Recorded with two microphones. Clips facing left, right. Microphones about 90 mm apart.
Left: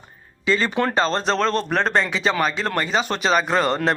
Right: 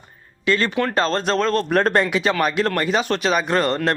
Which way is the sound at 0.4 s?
Centre (ahead or behind).